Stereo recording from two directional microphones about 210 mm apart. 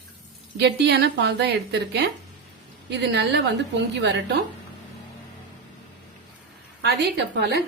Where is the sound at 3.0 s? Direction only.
55° right (ahead or behind).